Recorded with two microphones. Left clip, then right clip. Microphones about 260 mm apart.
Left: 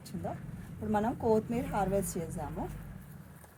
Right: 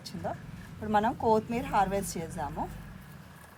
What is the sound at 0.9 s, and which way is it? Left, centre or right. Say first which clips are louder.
Speech: right 4 dB; right.